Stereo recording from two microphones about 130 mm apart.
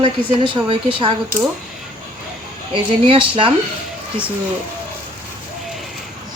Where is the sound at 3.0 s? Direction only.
40° right (ahead or behind).